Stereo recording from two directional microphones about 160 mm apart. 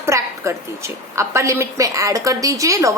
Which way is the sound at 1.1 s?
15° right (ahead or behind).